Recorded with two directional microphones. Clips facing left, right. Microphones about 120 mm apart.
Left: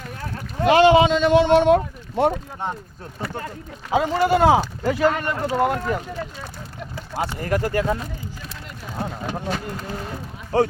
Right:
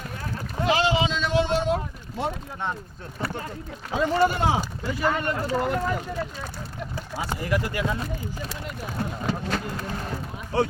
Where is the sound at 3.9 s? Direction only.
90° left.